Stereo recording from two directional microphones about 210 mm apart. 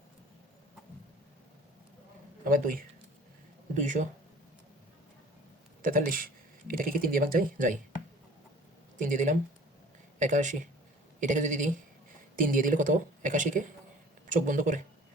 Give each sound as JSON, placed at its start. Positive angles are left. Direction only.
{"t": 2.4, "sound": "speech", "side_deg": -40}
{"t": 5.8, "sound": "speech", "side_deg": -40}
{"t": 9.0, "sound": "speech", "side_deg": -35}